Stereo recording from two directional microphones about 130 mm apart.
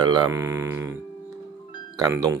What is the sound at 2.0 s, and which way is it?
Speech, 25° right (ahead or behind).